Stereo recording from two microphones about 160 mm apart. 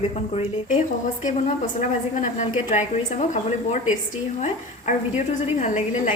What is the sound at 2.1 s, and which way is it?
A woman's voice, 50° left (ahead or behind).